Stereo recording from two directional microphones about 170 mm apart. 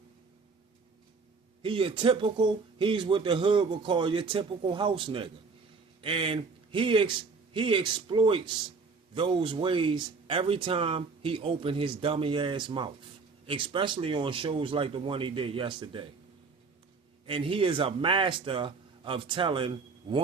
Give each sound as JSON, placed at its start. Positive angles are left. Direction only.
{"t": 1.6, "sound": "speech", "side_deg": -30}
{"t": 17.2, "sound": "speech", "side_deg": -30}